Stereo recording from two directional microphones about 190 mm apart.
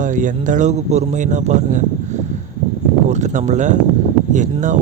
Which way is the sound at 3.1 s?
40° right (ahead or behind).